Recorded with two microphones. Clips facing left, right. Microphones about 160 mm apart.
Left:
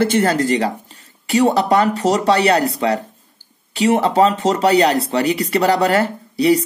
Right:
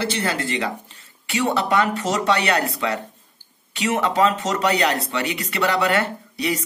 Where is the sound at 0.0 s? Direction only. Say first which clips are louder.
Left 9 dB; 45° left (ahead or behind).